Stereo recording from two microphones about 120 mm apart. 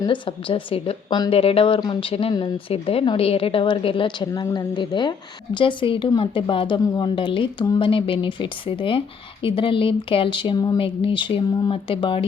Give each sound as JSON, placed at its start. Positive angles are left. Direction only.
{"t": 0.0, "sound": "speech", "side_deg": 45}
{"t": 2.7, "sound": "speech", "side_deg": 55}
{"t": 6.7, "sound": "speech", "side_deg": 35}
{"t": 10.8, "sound": "speech", "side_deg": 50}